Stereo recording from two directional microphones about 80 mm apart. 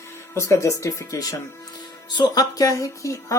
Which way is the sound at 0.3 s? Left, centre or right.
Left.